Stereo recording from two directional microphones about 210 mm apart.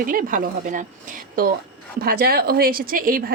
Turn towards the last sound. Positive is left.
turn(degrees=-40)  # may be behind; listen again after turning